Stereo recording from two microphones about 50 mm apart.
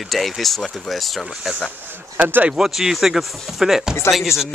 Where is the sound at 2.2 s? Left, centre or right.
Right.